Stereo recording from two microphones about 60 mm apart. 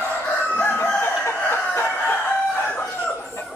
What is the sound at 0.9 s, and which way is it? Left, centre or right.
Chicken, left.